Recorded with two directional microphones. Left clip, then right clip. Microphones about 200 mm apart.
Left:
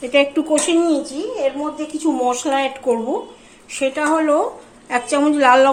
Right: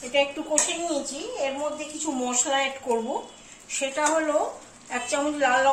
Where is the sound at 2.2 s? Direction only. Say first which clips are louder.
Left 4 dB; 55° left (ahead or behind).